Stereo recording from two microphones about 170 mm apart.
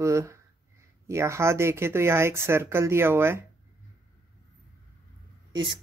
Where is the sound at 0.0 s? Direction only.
15° right (ahead or behind).